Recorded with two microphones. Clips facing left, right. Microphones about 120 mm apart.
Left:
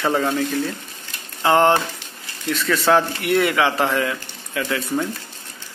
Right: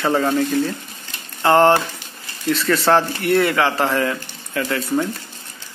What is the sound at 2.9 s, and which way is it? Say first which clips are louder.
Speech: even; centre (ahead or behind).